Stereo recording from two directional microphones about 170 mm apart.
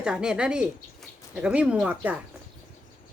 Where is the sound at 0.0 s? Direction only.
5° right (ahead or behind).